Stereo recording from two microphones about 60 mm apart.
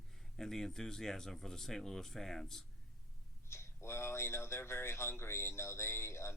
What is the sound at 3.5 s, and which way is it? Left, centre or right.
Speech, left.